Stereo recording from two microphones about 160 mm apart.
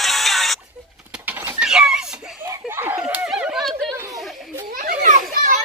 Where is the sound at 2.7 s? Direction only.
15° right (ahead or behind).